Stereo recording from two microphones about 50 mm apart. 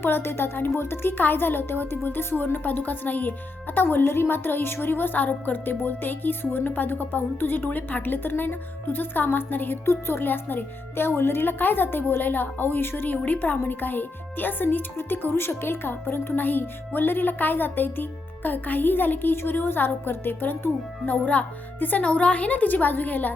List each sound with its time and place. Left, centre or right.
0.0 s speech: left
9.8 s speech: left
21.1 s speech: left